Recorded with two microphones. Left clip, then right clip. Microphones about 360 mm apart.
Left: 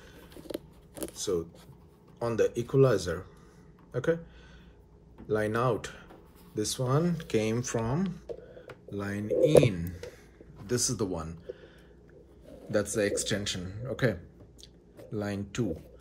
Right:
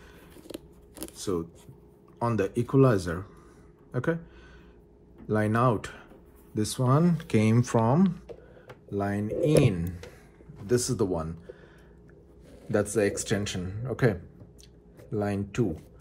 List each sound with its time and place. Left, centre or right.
0.9 s a sound: centre
2.1 s speech: centre
5.3 s speech: centre
12.7 s speech: centre
15.1 s speech: centre